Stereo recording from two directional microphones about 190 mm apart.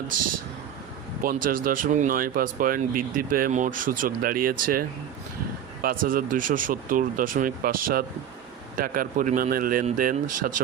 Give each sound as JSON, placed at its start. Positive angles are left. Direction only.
{"t": 1.2, "sound": "speech", "side_deg": -50}